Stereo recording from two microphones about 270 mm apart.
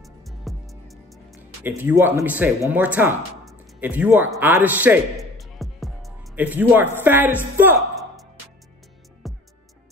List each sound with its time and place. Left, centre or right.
0.0 s music: centre
1.7 s speech: centre
9.2 s music: centre